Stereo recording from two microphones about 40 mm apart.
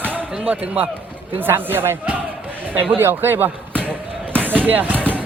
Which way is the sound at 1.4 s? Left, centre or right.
Right.